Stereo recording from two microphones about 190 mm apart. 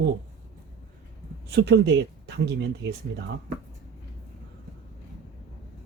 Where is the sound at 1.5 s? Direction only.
60° right (ahead or behind).